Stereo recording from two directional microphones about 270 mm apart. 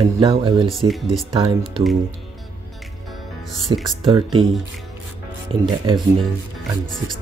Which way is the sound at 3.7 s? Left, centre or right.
Centre.